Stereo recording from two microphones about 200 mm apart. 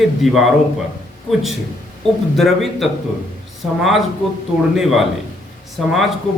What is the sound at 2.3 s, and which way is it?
Speech, centre (ahead or behind).